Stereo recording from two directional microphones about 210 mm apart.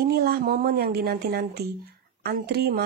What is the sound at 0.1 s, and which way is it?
Speech, 50° right (ahead or behind).